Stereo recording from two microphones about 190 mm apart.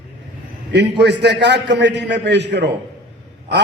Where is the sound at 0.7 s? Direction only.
65° right (ahead or behind).